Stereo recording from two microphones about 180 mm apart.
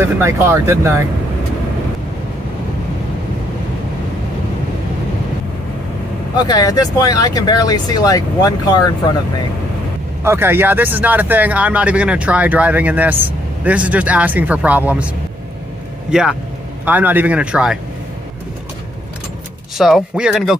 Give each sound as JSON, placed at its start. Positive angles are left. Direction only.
{"t": 0.0, "sound": "speech", "side_deg": -15}
{"t": 6.4, "sound": "speech", "side_deg": 20}
{"t": 10.2, "sound": "speech", "side_deg": -15}
{"t": 16.1, "sound": "speech", "side_deg": -5}
{"t": 19.8, "sound": "speech", "side_deg": -5}